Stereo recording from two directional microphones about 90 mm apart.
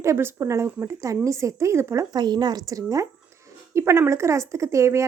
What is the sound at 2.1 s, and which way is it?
Speech, 50° right (ahead or behind).